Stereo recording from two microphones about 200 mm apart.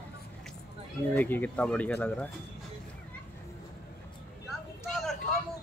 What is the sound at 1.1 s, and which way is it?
Speech, 10° left (ahead or behind).